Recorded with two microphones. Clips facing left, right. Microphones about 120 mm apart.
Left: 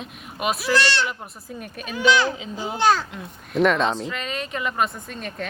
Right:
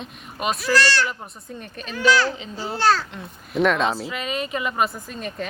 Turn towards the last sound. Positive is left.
turn(degrees=0)  # may be behind; listen again after turning